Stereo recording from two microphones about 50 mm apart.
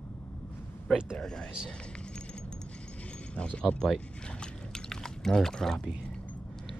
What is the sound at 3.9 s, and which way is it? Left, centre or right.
Pour, centre.